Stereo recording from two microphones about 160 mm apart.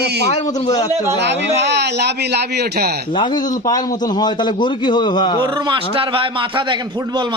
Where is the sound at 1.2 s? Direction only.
90° right.